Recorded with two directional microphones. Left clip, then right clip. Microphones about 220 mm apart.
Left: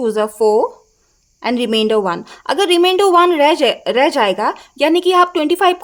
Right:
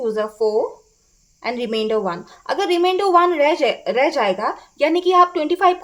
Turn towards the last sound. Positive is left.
turn(degrees=30)  # may be behind; listen again after turning